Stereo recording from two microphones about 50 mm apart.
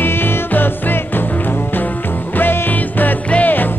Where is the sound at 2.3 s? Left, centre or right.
Left.